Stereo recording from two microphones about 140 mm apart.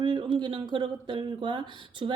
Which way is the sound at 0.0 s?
35° right (ahead or behind).